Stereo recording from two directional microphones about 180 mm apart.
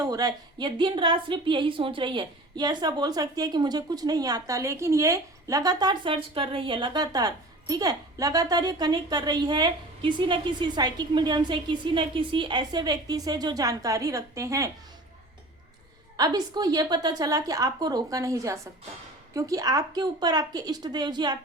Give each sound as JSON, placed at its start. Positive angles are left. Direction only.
{"t": 0.0, "sound": "a woman's voice", "side_deg": -20}
{"t": 16.1, "sound": "a woman's voice", "side_deg": -20}